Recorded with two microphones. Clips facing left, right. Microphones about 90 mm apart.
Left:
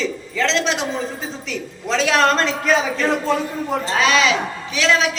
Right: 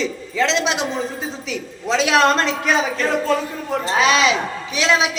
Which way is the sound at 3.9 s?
15° right (ahead or behind).